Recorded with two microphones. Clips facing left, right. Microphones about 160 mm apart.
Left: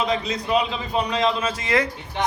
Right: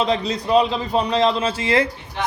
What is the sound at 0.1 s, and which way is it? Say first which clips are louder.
A man's voice: right 4 dB; 35° right (ahead or behind).